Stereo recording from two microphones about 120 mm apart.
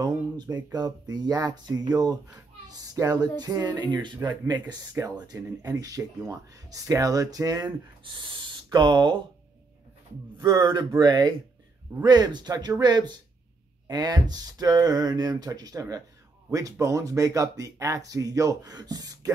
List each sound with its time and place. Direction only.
0.0 s speech: 30° right (ahead or behind)
8.0 s speech: 40° right (ahead or behind)
10.3 s speech: 35° right (ahead or behind)